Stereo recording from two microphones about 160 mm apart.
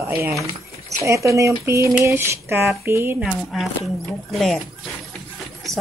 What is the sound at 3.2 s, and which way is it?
Speech, centre (ahead or behind).